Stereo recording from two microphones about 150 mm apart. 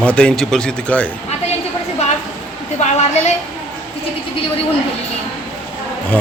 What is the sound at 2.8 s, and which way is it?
Speech, 50° left (ahead or behind).